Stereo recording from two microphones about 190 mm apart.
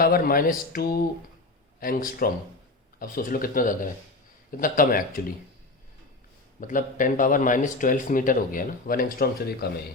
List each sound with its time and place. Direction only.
0.0 s speech: 50° left (ahead or behind)
6.6 s speech: 45° left (ahead or behind)